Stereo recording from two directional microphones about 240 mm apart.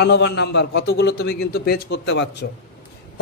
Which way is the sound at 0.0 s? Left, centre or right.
Left.